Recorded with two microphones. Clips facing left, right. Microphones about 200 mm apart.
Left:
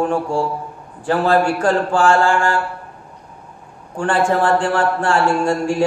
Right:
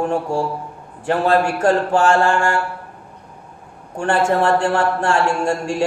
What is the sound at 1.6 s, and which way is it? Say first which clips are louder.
Speech: even; 25° right (ahead or behind).